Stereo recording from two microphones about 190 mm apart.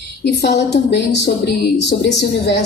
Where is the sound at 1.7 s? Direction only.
60° left (ahead or behind).